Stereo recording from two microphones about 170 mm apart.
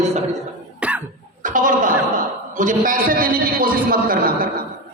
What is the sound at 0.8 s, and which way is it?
Cough, 5° right (ahead or behind).